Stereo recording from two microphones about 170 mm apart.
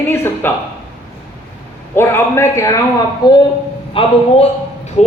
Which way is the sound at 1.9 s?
15° left (ahead or behind).